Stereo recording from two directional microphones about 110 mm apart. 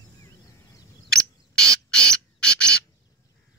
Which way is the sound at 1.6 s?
5° left (ahead or behind).